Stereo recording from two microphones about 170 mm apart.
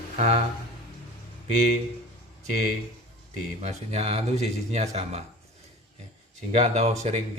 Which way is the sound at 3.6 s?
40° right (ahead or behind).